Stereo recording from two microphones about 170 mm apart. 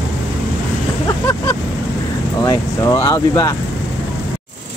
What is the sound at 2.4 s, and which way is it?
Speech, 20° left (ahead or behind).